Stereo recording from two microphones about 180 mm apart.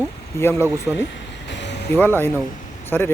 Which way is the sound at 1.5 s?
75° left (ahead or behind).